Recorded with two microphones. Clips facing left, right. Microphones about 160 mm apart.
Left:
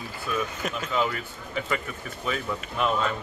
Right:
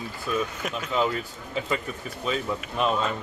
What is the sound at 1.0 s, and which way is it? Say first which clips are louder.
A man's voice: right 3 dB; 25° right (ahead or behind).